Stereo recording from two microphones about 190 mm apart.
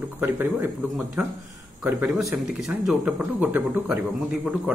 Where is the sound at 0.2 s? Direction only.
10° right (ahead or behind).